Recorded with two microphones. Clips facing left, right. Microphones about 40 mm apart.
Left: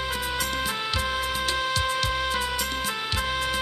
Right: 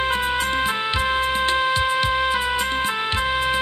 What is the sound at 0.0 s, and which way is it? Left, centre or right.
Music, right.